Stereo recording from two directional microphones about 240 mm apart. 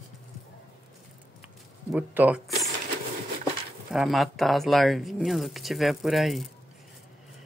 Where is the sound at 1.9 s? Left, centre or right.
Centre.